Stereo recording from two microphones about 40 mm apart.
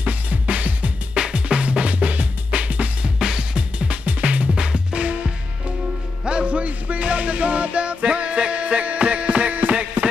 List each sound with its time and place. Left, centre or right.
0.0 s music: right
1.1 s music: centre; by 9.8 s right